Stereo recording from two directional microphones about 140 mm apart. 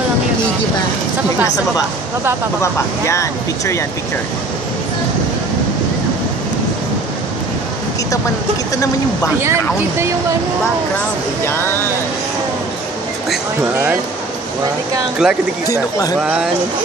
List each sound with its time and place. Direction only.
2.6 s speech: 20° left (ahead or behind)
9.4 s speech: 20° right (ahead or behind)
15.2 s speech: 5° right (ahead or behind)
15.6 s speech: 25° left (ahead or behind)
16.2 s speech: 5° right (ahead or behind)